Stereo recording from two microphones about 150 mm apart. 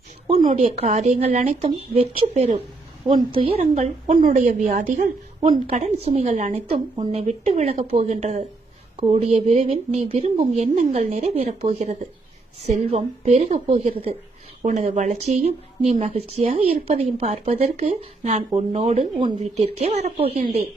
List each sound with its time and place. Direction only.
0.5 s a woman's voice: 45° right (ahead or behind)
3.1 s speech: 35° right (ahead or behind)
3.6 s a woman's voice: 50° right (ahead or behind)
14.6 s a woman's voice: 50° right (ahead or behind)